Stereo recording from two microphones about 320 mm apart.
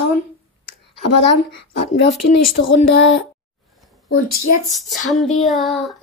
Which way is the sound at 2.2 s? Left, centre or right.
Left.